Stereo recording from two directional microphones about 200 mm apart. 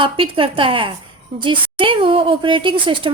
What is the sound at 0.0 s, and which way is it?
A woman's voice, 25° right (ahead or behind).